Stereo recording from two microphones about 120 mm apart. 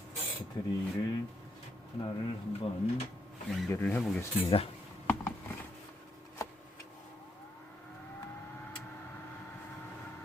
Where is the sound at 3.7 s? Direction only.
15° left (ahead or behind).